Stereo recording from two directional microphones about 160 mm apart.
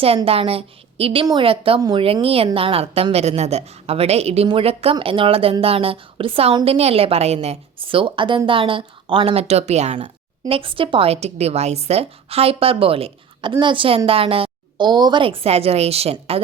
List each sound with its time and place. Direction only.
0.3 s speech: 35° right (ahead or behind)